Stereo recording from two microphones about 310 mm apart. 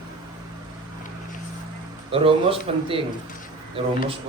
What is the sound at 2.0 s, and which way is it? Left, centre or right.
Speech, centre.